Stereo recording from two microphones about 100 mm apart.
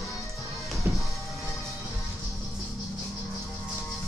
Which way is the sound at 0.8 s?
20° right (ahead or behind).